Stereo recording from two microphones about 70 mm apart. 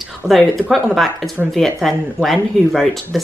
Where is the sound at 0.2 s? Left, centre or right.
Centre.